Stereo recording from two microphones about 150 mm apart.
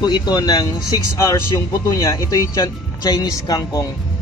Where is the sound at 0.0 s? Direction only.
30° left (ahead or behind).